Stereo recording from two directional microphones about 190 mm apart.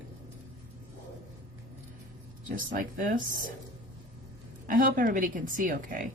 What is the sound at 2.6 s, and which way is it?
Speech, 45° right (ahead or behind).